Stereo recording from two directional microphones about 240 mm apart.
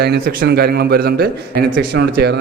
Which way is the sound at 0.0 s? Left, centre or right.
Right.